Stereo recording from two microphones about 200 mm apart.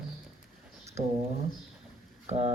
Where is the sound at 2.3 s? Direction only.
30° right (ahead or behind).